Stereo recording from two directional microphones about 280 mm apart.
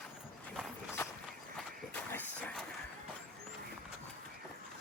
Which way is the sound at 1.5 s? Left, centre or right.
Centre.